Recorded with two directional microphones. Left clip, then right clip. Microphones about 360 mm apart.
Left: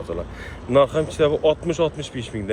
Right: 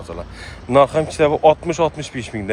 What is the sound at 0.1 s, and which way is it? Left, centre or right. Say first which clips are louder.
Speech: right 1 dB; centre.